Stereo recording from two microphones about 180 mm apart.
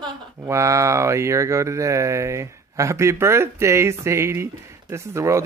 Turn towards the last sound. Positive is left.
turn(degrees=-15)  # may be behind; listen again after turning